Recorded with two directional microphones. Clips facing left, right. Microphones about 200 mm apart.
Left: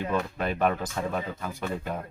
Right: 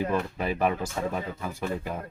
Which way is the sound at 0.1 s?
5° right (ahead or behind).